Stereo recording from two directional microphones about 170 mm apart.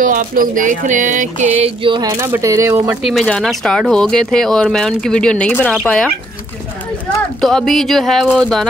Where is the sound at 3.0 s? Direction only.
Centre (ahead or behind).